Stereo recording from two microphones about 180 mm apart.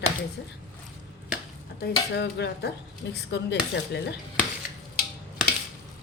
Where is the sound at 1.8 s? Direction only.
65° left (ahead or behind).